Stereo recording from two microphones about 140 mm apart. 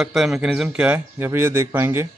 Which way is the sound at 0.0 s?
Centre (ahead or behind).